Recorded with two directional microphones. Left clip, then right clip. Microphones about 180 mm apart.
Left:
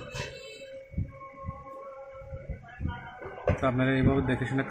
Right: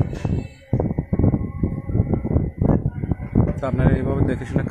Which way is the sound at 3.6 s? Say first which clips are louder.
Right 1 dB; 40° right (ahead or behind).